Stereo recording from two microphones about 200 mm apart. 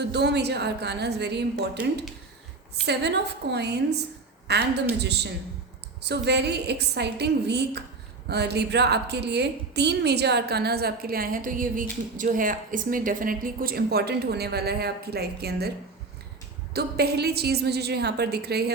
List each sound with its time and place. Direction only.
0.0 s a woman's voice: 55° right (ahead or behind)
2.8 s a woman's voice: 55° right (ahead or behind)
16.7 s a woman's voice: 55° right (ahead or behind)